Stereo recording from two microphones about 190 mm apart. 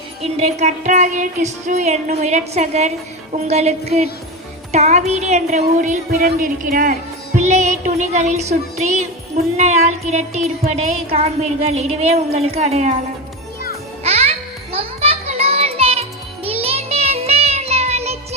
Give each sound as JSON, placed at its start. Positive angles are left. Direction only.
{"t": 0.2, "sound": "music", "side_deg": -35}
{"t": 14.0, "sound": "music", "side_deg": -35}